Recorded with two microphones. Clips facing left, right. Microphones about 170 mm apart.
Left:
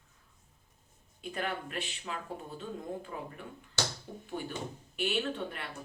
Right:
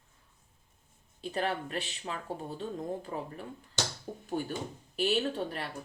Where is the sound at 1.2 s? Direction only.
35° right (ahead or behind).